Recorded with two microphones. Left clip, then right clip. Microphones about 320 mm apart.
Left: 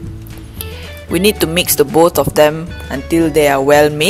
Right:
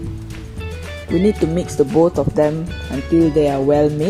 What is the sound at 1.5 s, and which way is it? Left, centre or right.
Speech, left.